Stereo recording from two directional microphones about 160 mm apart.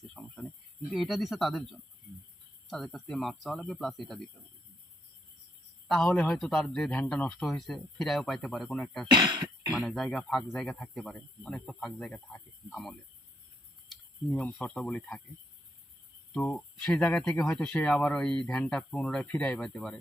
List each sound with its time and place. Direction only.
0.2 s a sound: centre (ahead or behind)
0.9 s speech: centre (ahead or behind)
2.6 s speech: centre (ahead or behind)
5.9 s speech: 5° left (ahead or behind)
9.0 s speech: 25° right (ahead or behind)
9.9 s speech: centre (ahead or behind)
16.3 s speech: 5° left (ahead or behind)